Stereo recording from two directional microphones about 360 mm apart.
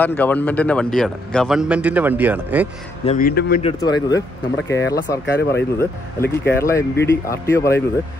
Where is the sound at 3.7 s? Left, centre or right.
Centre.